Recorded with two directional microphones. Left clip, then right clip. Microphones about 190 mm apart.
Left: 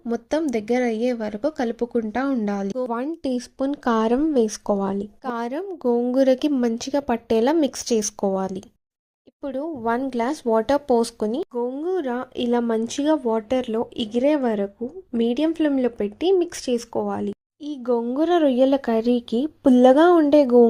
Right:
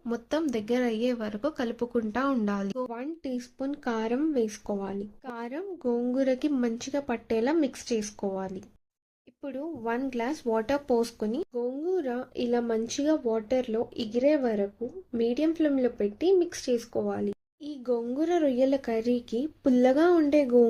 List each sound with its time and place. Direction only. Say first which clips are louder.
0.1 s speech: left 6 dB; 30° left (ahead or behind)
11.5 s speech: left 5 dB; 40° left (ahead or behind); by 20.7 s 25° left (ahead or behind)